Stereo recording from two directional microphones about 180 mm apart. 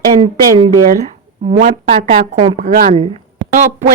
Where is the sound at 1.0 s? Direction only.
30° right (ahead or behind).